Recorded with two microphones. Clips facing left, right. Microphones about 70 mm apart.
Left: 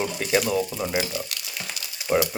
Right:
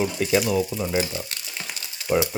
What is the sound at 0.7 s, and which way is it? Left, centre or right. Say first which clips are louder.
Speech: right 1 dB; centre.